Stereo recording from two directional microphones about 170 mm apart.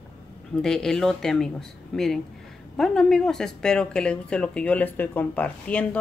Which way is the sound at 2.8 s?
5° left (ahead or behind).